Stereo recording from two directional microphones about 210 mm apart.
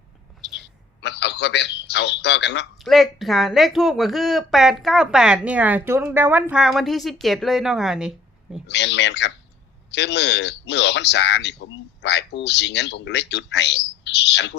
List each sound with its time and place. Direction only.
1.0 s a man's voice: 55° left (ahead or behind)
2.7 s speech: centre (ahead or behind)
8.6 s a man's voice: 55° left (ahead or behind)